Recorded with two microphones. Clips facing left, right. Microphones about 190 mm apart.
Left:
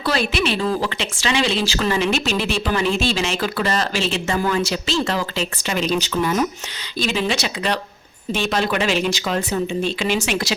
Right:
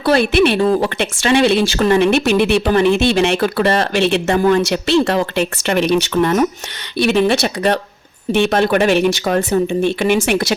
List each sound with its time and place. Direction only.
0.0 s speech: 55° right (ahead or behind)